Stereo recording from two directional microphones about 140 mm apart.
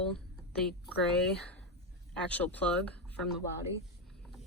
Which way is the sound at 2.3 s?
10° left (ahead or behind).